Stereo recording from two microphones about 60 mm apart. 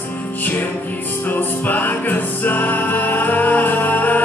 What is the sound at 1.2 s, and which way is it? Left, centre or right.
Music, left.